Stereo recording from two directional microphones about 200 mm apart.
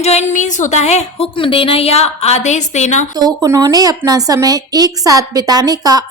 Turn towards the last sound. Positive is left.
turn(degrees=-20)  # may be behind; listen again after turning